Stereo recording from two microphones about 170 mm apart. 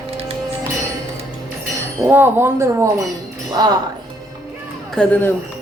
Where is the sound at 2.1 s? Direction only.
10° right (ahead or behind).